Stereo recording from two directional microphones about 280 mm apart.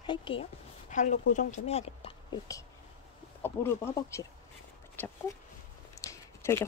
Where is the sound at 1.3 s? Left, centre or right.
Left; by 5.1 s centre.